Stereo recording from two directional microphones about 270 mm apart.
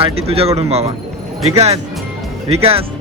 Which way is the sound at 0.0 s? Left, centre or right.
Right.